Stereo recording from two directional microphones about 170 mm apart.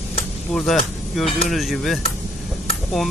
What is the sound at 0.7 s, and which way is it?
Speech, centre (ahead or behind).